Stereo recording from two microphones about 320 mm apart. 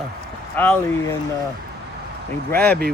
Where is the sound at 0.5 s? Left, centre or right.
Centre.